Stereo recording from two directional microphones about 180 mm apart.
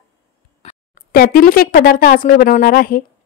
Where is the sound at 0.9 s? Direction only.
55° left (ahead or behind).